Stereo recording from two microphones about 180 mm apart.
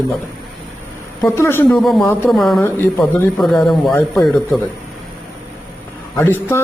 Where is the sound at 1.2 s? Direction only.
15° left (ahead or behind).